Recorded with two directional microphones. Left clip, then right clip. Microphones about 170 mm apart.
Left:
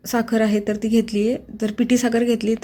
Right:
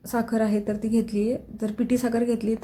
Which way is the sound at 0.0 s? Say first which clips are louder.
Left 5 dB; 20° left (ahead or behind).